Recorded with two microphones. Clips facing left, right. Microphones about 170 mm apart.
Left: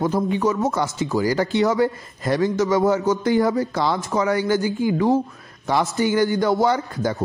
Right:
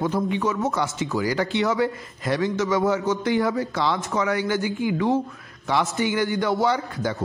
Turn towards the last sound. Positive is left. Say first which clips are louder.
# left 3 dB
turn(degrees=40)  # may be behind; listen again after turning